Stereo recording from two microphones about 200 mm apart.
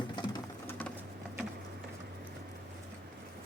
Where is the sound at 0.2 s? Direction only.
20° left (ahead or behind).